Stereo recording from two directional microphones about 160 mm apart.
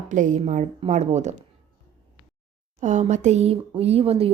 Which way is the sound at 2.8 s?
50° right (ahead or behind).